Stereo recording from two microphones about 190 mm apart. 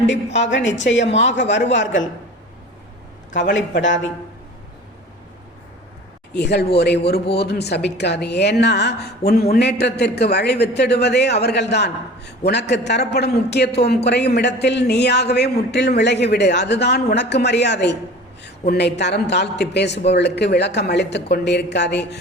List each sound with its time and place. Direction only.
0.1 s a woman's voice: 70° left (ahead or behind)
3.3 s a woman's voice: 75° left (ahead or behind)
6.3 s a woman's voice: 60° left (ahead or behind)